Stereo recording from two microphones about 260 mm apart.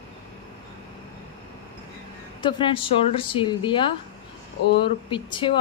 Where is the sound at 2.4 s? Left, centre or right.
Centre.